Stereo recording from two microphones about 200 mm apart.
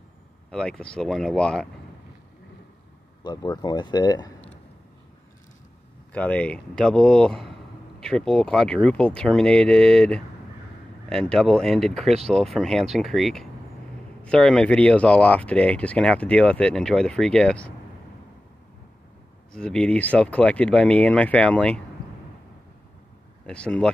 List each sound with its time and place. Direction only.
0.5 s speech: 5° left (ahead or behind)
3.3 s speech: 20° left (ahead or behind)
6.1 s speech: 5° left (ahead or behind)
19.5 s speech: 5° left (ahead or behind)
23.4 s speech: 5° left (ahead or behind)